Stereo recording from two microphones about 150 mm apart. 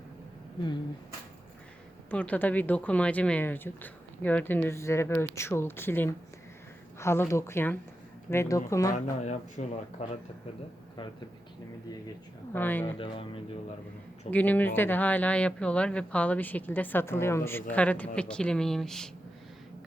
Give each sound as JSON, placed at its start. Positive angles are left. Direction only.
{"t": 2.0, "sound": "speech", "side_deg": 10}
{"t": 9.2, "sound": "speech", "side_deg": 50}
{"t": 12.5, "sound": "speech", "side_deg": 10}
{"t": 13.0, "sound": "speech", "side_deg": 35}
{"t": 14.3, "sound": "speech", "side_deg": 10}